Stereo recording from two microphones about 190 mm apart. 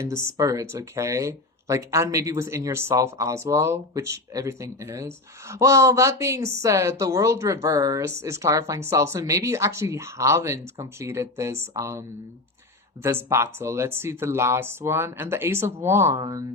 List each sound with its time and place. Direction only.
0.0 s speech: 15° right (ahead or behind)